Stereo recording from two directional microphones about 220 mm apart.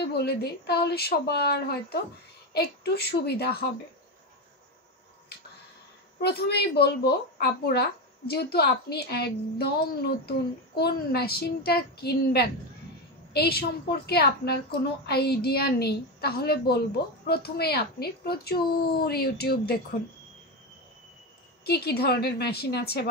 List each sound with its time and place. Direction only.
0.0 s speech: 50° left (ahead or behind)
6.2 s speech: 45° left (ahead or behind)
21.6 s speech: 45° left (ahead or behind)